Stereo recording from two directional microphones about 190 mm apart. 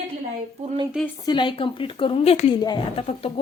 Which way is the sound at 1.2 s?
25° left (ahead or behind).